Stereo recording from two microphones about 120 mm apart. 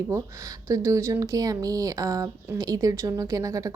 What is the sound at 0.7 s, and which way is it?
Speech, 25° right (ahead or behind).